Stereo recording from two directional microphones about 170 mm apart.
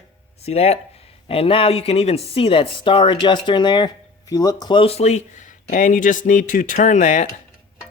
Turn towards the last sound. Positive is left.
turn(degrees=45)  # may be behind; listen again after turning